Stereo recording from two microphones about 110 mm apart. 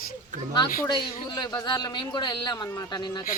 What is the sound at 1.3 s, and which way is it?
A woman's voice, 40° left (ahead or behind).